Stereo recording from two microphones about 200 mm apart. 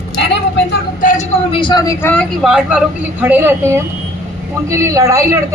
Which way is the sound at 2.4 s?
5° right (ahead or behind).